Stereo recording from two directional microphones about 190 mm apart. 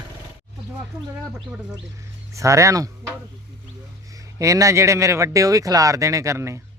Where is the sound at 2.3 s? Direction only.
15° right (ahead or behind).